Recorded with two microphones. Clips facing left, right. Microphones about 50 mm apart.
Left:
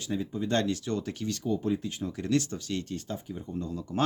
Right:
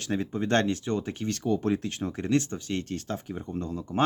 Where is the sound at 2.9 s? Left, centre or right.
Right.